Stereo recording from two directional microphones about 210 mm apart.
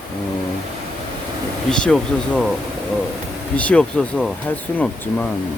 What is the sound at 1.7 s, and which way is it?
Speech, 5° left (ahead or behind).